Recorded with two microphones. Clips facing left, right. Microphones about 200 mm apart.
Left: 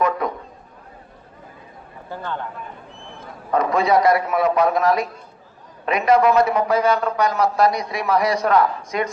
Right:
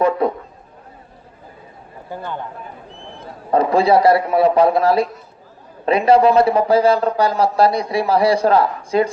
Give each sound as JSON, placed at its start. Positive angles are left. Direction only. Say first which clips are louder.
{"t": 0.0, "sound": "a man's voice", "louder": "right 5 dB", "side_deg": -30}
{"t": 2.0, "sound": "a man's voice", "louder": "right 1 dB", "side_deg": -15}
{"t": 3.2, "sound": "a man's voice", "louder": "right 4 dB", "side_deg": -30}